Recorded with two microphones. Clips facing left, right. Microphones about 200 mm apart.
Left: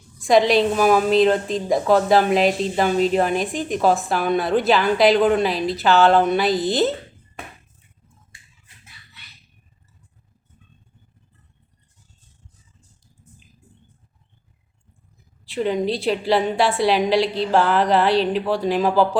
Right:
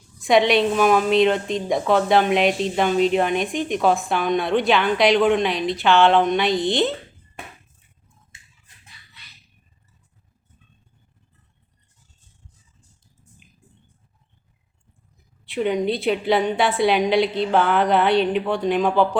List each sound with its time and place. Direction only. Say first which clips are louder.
0.2 s a woman's voice: left 1 dB; centre (ahead or behind)
8.3 s finger snapping: left 1 dB; 25° right (ahead or behind)
15.4 s a woman's voice: even; centre (ahead or behind)